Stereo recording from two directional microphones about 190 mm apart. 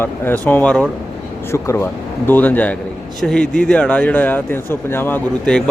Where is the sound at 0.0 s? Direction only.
10° left (ahead or behind).